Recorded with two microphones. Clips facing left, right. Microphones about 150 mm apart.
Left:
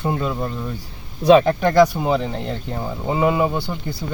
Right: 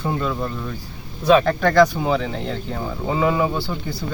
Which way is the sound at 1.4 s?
15° left (ahead or behind).